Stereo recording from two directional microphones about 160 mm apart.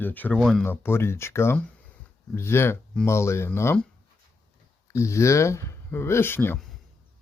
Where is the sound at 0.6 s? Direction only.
15° left (ahead or behind).